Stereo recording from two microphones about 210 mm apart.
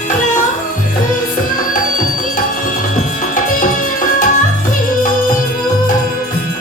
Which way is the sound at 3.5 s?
40° left (ahead or behind).